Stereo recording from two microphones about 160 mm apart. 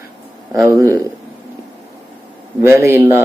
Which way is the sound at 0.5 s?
15° right (ahead or behind).